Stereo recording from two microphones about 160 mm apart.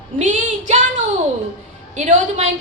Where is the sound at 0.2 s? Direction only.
50° right (ahead or behind).